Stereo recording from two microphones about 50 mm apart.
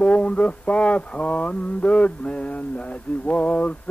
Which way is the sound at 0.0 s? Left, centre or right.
Left.